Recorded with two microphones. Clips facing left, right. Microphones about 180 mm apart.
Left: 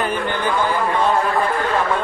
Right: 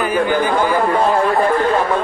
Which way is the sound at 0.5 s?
40° right (ahead or behind).